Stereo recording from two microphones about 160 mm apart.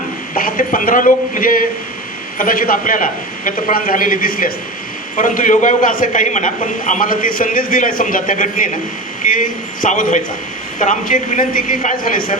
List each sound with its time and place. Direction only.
0.3 s a man's voice: 60° left (ahead or behind)